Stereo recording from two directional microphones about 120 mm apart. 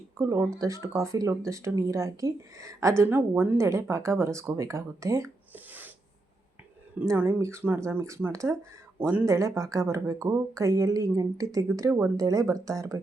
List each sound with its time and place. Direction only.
0.2 s speech: 25° right (ahead or behind)
5.5 s sneeze: 15° right (ahead or behind)
7.2 s speech: 20° right (ahead or behind)
9.0 s speech: 15° right (ahead or behind)
9.2 s speech: 25° right (ahead or behind)